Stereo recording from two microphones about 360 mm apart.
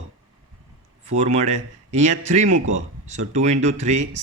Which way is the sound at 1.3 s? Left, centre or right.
Centre.